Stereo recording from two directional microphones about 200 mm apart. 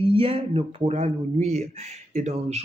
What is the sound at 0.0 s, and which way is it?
Speech, 30° right (ahead or behind).